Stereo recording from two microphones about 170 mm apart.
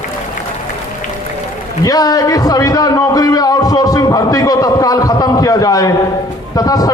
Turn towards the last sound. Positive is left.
turn(degrees=20)  # may be behind; listen again after turning